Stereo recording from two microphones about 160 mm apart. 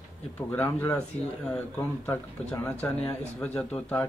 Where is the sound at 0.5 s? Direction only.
15° left (ahead or behind).